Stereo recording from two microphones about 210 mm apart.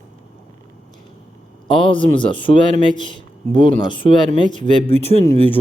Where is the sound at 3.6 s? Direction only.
25° left (ahead or behind).